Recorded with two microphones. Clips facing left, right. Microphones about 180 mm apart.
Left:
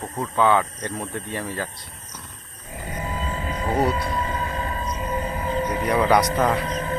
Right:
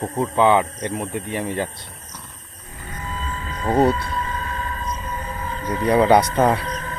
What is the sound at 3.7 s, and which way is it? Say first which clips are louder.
Speech: right 5 dB; 30° right (ahead or behind).